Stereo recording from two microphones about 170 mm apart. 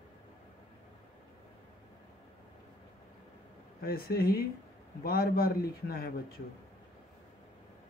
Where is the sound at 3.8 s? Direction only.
60° left (ahead or behind).